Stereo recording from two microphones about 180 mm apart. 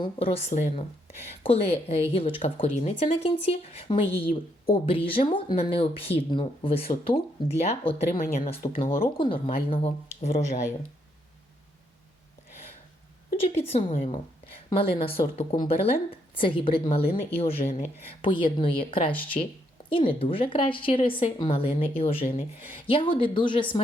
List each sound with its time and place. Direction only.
0.0 s speech: 30° left (ahead or behind)
13.5 s a woman's voice: 35° left (ahead or behind)
19.4 s speech: 40° left (ahead or behind)
19.9 s speech: 30° left (ahead or behind)